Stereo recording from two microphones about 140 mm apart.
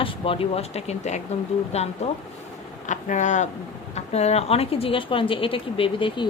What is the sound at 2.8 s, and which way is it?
A woman's voice, 60° left (ahead or behind).